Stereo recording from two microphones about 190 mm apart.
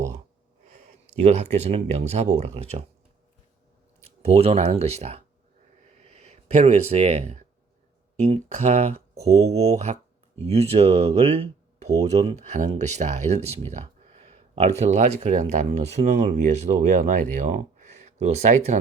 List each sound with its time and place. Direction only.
1.2 s speech: 35° right (ahead or behind)
4.0 s speech: 35° right (ahead or behind)
5.8 s a sound: 35° right (ahead or behind)
8.2 s speech: 35° right (ahead or behind)